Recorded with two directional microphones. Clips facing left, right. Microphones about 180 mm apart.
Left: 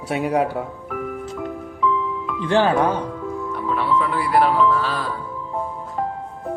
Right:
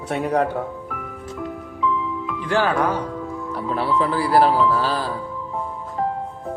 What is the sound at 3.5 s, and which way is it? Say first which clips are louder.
Speech: even; 35° right (ahead or behind).